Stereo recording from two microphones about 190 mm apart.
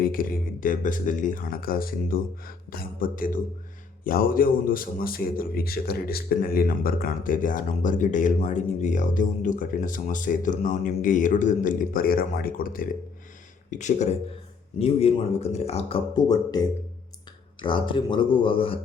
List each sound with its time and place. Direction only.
0.0 s a man's voice: 50° left (ahead or behind); by 16.0 s 35° left (ahead or behind)
16.1 s speech: 20° left (ahead or behind)